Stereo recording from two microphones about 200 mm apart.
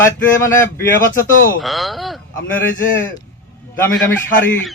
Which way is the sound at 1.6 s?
Centre (ahead or behind).